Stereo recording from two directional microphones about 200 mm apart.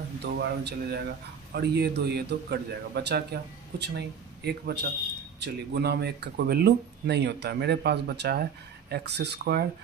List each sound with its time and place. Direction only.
0.2 s a man's voice: 55° right (ahead or behind)
4.5 s speech: 55° right (ahead or behind)